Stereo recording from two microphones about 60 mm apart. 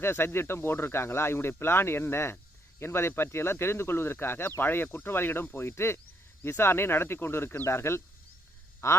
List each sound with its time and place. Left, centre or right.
0.0 s speech: left
8.8 s speech: left